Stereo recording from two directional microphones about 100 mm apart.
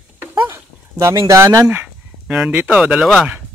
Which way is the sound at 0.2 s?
25° right (ahead or behind).